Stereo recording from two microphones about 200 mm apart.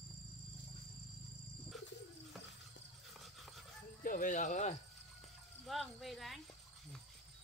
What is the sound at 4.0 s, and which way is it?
Speech, 45° left (ahead or behind).